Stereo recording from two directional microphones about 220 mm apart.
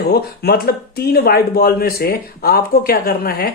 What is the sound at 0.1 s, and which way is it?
Speech, 45° left (ahead or behind).